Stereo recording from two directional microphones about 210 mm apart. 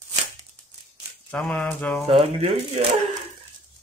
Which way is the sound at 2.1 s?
30° right (ahead or behind).